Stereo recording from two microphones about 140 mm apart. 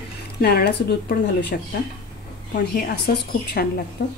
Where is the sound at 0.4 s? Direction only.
90° left.